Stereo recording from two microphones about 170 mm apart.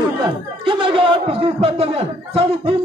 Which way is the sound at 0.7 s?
30° right (ahead or behind).